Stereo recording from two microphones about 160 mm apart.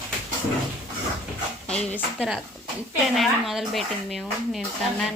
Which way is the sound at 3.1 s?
Centre (ahead or behind).